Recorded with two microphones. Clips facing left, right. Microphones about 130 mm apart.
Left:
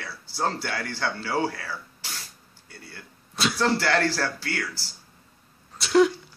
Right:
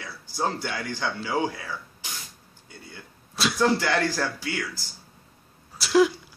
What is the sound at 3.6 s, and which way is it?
Speech, 15° right (ahead or behind).